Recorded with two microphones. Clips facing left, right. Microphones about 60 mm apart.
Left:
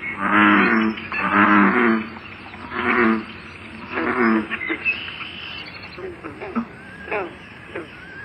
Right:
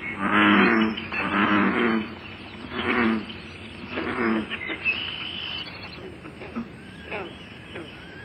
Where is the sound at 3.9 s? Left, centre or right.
Left.